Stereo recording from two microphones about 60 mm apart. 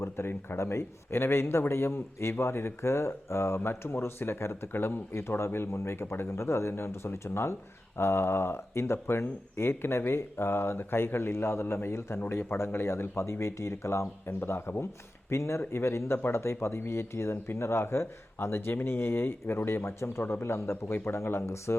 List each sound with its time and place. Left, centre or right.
0.0 s speech: left
14.3 s speech: left
15.3 s speech: left
20.9 s speech: left